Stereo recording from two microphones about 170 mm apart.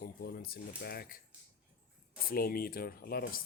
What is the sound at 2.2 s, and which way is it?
Speech, 60° left (ahead or behind).